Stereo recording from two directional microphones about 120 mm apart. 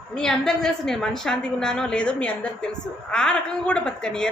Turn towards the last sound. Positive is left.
turn(degrees=5)  # may be behind; listen again after turning